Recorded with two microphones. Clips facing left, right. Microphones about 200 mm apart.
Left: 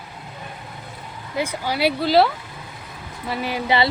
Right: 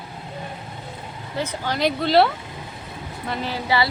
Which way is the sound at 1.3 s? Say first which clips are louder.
Left 2 dB; 10° left (ahead or behind).